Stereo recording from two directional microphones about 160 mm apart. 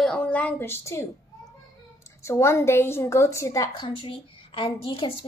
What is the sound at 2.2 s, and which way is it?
A woman's voice, 20° left (ahead or behind).